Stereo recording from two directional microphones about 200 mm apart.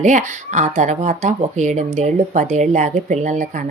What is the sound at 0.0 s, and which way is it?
Speech, 35° right (ahead or behind).